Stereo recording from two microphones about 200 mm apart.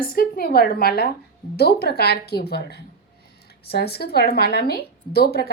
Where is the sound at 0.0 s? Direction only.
45° left (ahead or behind).